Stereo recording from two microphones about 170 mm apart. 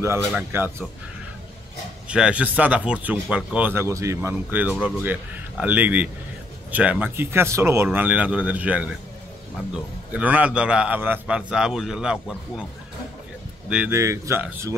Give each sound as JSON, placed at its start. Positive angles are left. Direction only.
{"t": 0.4, "sound": "speech", "side_deg": -15}
{"t": 2.0, "sound": "speech", "side_deg": -5}
{"t": 10.1, "sound": "speech", "side_deg": -10}
{"t": 13.7, "sound": "speech", "side_deg": -10}